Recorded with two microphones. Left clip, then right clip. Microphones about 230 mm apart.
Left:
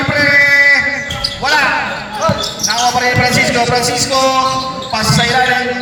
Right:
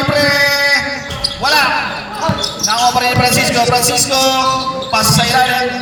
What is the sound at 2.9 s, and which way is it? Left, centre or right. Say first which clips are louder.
A man's voice: even; right.